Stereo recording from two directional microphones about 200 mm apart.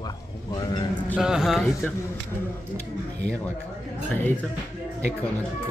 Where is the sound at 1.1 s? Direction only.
5° right (ahead or behind).